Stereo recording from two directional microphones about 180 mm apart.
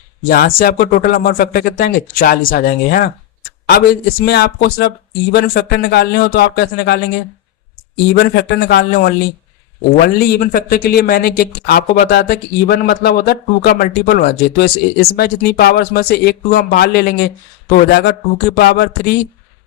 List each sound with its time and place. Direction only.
0.3 s speech: 55° left (ahead or behind)
4.3 s speech: 65° left (ahead or behind)
8.1 s speech: 60° left (ahead or behind)